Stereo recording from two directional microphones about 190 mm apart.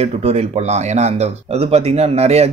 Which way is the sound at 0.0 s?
35° right (ahead or behind).